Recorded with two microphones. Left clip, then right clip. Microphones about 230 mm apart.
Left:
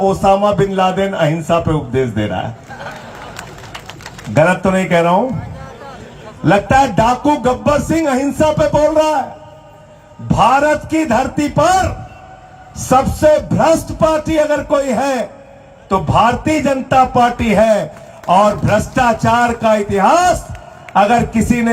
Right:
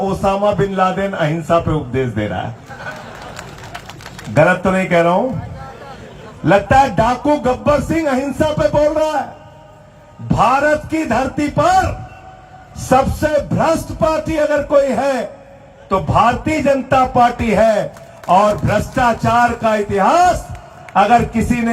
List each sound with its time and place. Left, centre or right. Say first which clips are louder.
0.0 s music: left 4 dB; left
4.4 s music: even; left
6.4 s music: even; left
10.2 s music: left 2 dB; left
12.9 s music: left 3 dB; left